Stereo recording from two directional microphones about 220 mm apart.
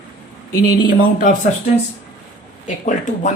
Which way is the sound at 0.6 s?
40° left (ahead or behind).